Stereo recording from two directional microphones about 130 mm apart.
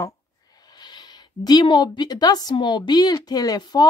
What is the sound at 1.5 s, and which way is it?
A woman's voice, 35° left (ahead or behind).